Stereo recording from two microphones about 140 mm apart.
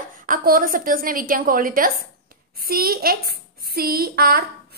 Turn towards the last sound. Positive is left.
turn(degrees=-90)